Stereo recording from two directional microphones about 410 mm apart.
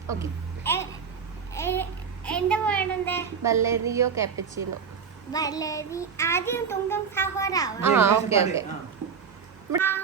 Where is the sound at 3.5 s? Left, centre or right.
Centre.